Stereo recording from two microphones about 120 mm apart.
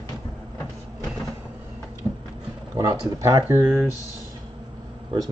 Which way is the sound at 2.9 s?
30° right (ahead or behind).